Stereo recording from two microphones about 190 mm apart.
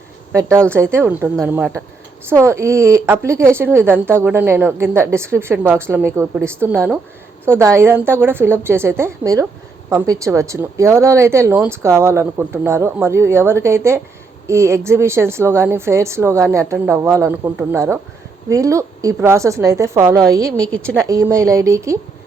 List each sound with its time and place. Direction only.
0.9 s speech: 10° right (ahead or behind)